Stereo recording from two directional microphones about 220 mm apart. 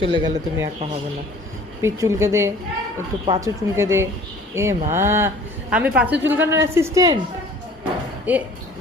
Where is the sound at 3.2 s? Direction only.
25° right (ahead or behind).